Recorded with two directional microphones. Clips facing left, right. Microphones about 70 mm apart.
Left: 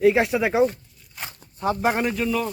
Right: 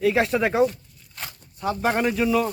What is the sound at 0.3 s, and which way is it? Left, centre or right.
Speech, centre.